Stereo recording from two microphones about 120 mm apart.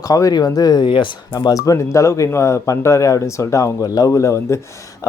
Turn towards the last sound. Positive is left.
turn(degrees=25)  # may be behind; listen again after turning